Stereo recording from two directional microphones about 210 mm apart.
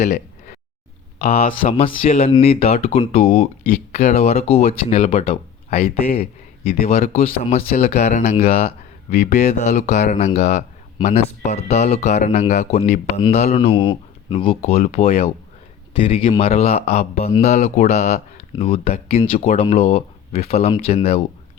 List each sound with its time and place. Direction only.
0.0 s a sound: 35° left (ahead or behind)
1.2 s a man's voice: 30° left (ahead or behind)
6.8 s a man's voice: 30° left (ahead or behind)